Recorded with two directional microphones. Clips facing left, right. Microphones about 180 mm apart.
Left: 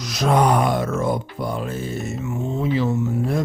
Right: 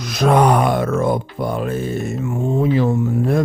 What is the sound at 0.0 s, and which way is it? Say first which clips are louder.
Speech: right 4 dB; 55° right (ahead or behind).